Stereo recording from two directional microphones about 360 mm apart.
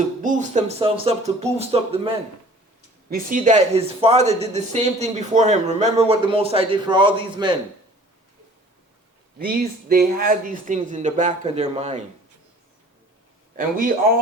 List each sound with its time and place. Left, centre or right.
0.2 s speech: right
9.4 s speech: right
13.6 s speech: right